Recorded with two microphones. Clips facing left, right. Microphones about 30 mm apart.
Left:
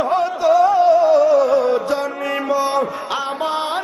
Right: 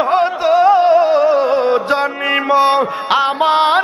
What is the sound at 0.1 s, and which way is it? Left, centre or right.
Music, right.